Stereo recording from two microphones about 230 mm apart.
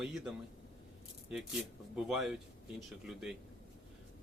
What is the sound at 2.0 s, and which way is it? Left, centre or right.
A man's voice, centre.